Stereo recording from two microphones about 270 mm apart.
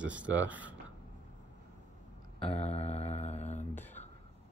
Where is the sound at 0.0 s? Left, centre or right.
Centre.